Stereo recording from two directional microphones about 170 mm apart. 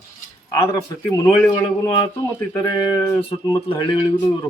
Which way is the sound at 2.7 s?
25° left (ahead or behind).